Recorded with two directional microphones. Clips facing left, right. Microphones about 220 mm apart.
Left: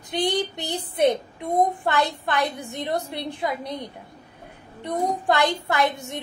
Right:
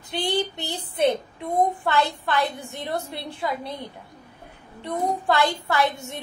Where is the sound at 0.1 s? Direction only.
15° left (ahead or behind).